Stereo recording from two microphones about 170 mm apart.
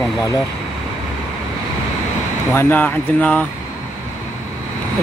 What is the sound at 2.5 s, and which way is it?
Speech, 15° left (ahead or behind).